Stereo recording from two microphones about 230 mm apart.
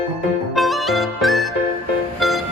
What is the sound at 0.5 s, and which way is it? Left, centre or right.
Music, centre.